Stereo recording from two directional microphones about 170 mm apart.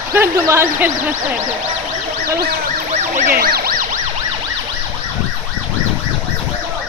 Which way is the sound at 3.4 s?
60° right (ahead or behind).